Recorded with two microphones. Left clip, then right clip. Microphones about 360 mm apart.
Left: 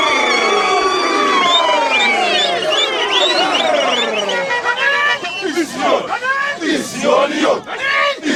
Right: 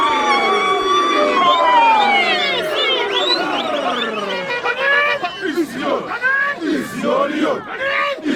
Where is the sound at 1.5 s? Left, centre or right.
Left.